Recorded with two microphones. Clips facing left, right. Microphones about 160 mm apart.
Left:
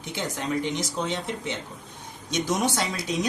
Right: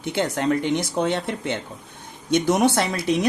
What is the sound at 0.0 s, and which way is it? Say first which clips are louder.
Speech: right 8 dB; 60° right (ahead or behind).